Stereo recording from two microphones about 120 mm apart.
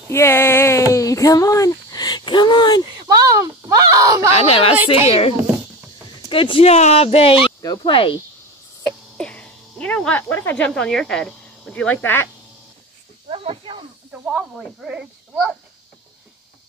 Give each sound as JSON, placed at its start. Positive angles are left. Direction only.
{"t": 0.1, "sound": "a sound", "side_deg": 20}
{"t": 3.0, "sound": "groan", "side_deg": -30}
{"t": 4.3, "sound": "speech", "side_deg": 55}
{"t": 7.6, "sound": "speech", "side_deg": 30}
{"t": 7.9, "sound": "speech", "side_deg": 45}
{"t": 9.1, "sound": "speech", "side_deg": 10}
{"t": 13.3, "sound": "snake", "side_deg": -50}
{"t": 14.1, "sound": "speech", "side_deg": -10}